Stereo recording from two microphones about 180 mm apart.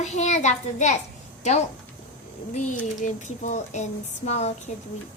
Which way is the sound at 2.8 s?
45° left (ahead or behind).